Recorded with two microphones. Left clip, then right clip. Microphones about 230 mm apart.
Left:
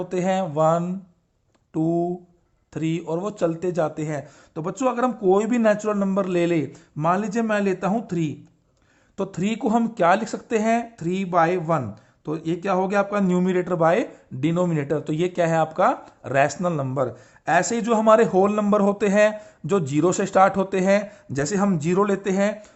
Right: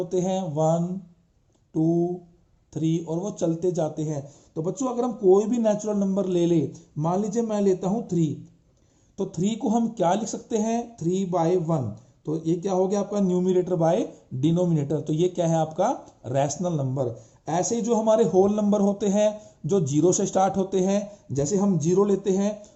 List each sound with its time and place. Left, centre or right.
0.0 s speech: left
1.7 s speech: left
2.7 s speech: left
3.0 s speech: left
3.3 s speech: left